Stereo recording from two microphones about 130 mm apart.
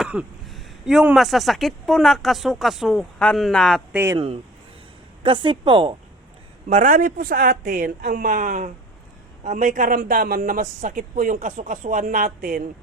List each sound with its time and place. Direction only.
0.4 s a woman's voice: centre (ahead or behind)
3.9 s speech: 20° right (ahead or behind)
5.2 s a woman's voice: 40° right (ahead or behind)
6.7 s a woman's voice: 80° right